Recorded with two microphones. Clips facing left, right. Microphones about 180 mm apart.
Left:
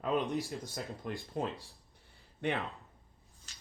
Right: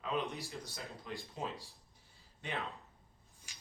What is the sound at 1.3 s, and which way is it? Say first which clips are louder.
Speech: left 7 dB; 60° left (ahead or behind).